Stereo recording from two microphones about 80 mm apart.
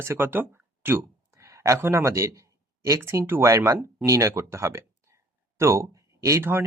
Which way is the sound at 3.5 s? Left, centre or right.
Right.